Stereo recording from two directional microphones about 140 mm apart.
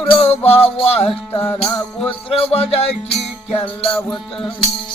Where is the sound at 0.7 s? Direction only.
45° left (ahead or behind).